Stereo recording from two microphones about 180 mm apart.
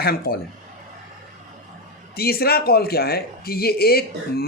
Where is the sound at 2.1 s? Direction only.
60° left (ahead or behind).